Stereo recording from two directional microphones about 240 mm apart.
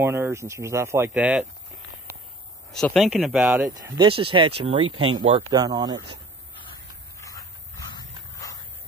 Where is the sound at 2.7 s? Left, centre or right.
Centre.